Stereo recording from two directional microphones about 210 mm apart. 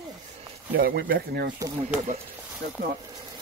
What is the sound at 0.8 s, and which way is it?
Speech, 45° right (ahead or behind).